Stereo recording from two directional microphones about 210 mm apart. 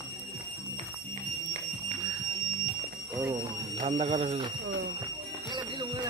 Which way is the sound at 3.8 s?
30° right (ahead or behind).